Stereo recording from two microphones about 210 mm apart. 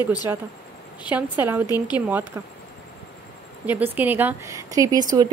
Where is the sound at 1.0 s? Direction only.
5° right (ahead or behind).